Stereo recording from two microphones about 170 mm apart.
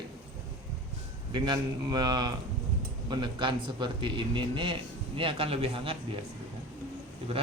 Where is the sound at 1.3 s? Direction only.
25° right (ahead or behind).